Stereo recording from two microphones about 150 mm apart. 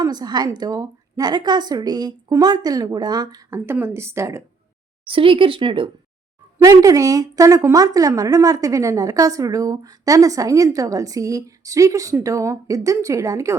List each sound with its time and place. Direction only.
0.0 s a woman's voice: 25° right (ahead or behind)
5.0 s speech: 35° right (ahead or behind)
6.6 s a woman's voice: 20° right (ahead or behind)